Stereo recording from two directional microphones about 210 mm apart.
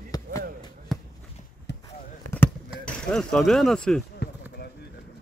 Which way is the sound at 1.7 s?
55° left (ahead or behind).